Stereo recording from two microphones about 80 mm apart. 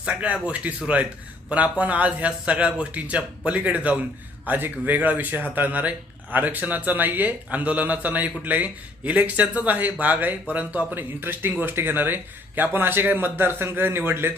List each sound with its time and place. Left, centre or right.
0.0 s speech: centre